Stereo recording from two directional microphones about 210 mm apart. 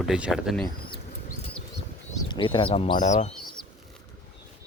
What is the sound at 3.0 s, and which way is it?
Speech, 35° left (ahead or behind).